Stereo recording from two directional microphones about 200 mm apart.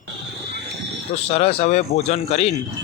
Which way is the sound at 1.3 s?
30° left (ahead or behind).